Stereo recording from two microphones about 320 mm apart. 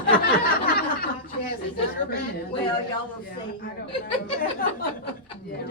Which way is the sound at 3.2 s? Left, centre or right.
Left.